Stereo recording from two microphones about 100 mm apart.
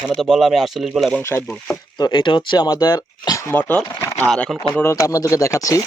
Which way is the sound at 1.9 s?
45° left (ahead or behind).